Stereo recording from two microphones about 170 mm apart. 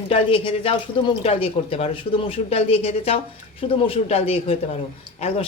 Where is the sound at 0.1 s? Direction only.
30° left (ahead or behind).